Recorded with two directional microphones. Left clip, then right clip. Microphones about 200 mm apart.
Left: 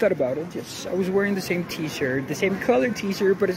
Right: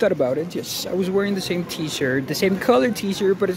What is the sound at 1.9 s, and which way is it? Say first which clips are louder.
Speech: right 4 dB; 15° right (ahead or behind).